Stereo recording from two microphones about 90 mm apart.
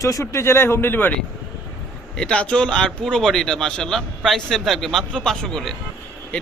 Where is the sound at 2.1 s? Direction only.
10° left (ahead or behind).